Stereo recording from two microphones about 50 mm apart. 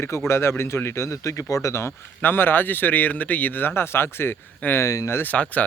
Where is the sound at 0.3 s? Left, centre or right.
Left.